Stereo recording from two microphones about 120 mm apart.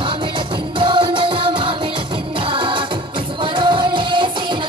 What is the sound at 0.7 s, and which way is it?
Music, 40° right (ahead or behind).